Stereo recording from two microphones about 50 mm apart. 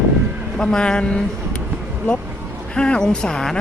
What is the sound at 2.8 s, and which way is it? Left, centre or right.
Speech, centre.